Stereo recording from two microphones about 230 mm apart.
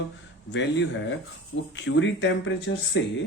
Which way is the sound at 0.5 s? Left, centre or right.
Left.